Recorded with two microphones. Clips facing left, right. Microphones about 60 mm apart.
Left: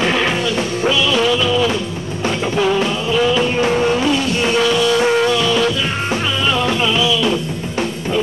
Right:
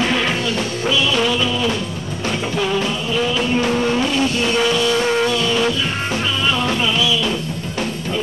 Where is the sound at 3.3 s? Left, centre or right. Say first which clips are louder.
Left 2 dB; centre.